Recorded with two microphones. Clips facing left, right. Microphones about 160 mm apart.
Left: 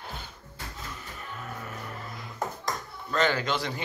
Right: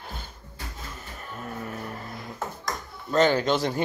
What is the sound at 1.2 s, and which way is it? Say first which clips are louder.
Music: right 3 dB; 45° right (ahead or behind).